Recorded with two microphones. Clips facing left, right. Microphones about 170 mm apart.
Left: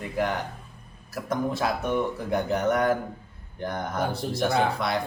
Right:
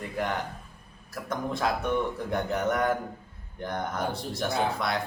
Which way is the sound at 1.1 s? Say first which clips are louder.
Left 4 dB; 5° left (ahead or behind).